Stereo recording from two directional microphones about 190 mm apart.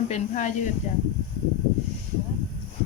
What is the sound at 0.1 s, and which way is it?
Speech, 40° left (ahead or behind).